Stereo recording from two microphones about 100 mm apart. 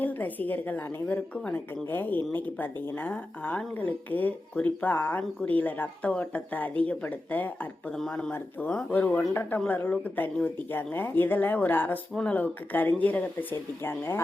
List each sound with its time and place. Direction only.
0.0 s a woman's voice: 15° left (ahead or behind)
7.9 s a woman's voice: 5° left (ahead or behind); by 14.2 s 20° left (ahead or behind)